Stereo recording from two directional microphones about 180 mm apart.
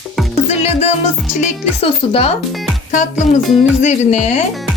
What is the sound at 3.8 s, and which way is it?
Speech, 40° left (ahead or behind).